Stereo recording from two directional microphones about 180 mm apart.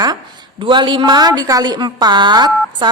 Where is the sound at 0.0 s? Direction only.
25° right (ahead or behind).